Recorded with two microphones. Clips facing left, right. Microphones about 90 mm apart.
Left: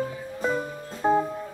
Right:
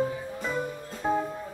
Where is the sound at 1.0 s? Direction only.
40° left (ahead or behind).